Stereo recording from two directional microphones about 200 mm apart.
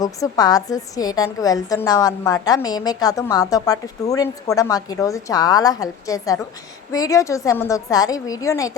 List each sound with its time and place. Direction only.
0.0 s a woman's voice: 20° left (ahead or behind)